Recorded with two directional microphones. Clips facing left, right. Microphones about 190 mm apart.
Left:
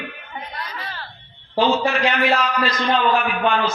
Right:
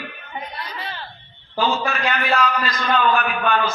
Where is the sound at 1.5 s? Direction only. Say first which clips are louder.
Left 4 dB; 25° left (ahead or behind).